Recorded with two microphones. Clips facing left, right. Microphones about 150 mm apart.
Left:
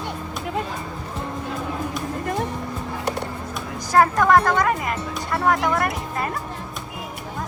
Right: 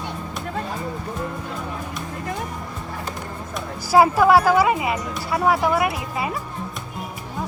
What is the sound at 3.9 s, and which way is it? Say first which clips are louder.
Speech: right 2 dB; 5° right (ahead or behind).